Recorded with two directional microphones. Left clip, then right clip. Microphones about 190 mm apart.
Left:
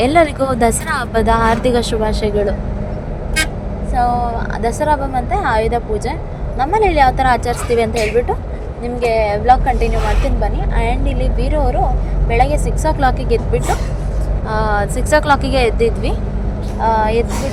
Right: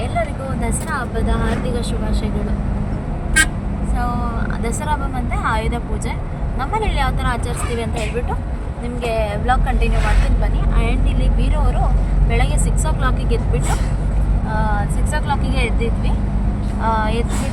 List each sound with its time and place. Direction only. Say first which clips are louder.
0.0 s speech: left 11 dB; 50° left (ahead or behind)
3.9 s a woman's voice: left 9 dB; 30° left (ahead or behind)
10.8 s a woman's voice: left 5 dB; 25° left (ahead or behind)
14.5 s speech: left 6 dB; 40° left (ahead or behind)
16.8 s a woman's voice: left 6 dB; 20° left (ahead or behind)